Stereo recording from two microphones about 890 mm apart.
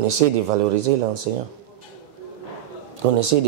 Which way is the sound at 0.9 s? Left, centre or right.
Right.